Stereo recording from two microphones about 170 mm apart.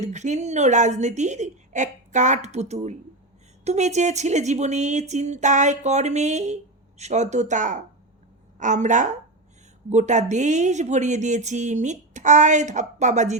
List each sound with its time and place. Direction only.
0.0 s a woman's voice: 45° right (ahead or behind)